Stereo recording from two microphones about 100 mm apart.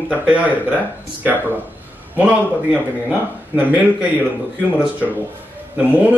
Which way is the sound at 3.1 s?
15° right (ahead or behind).